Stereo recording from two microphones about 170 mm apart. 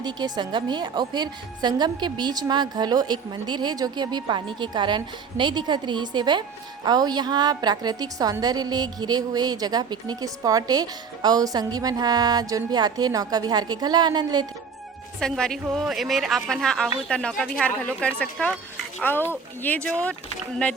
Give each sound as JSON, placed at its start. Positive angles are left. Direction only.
{"t": 0.0, "sound": "a woman's voice", "side_deg": -25}
{"t": 15.2, "sound": "a woman's voice", "side_deg": 5}